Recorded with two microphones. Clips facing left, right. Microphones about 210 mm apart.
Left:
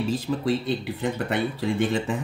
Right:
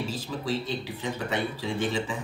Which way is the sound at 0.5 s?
60° left (ahead or behind).